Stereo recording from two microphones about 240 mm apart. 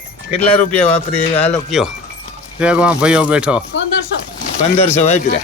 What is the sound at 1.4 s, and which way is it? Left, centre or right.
Speech, centre.